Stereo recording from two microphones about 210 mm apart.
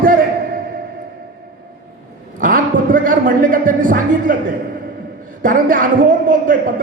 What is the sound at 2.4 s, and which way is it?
A man's voice, 40° right (ahead or behind).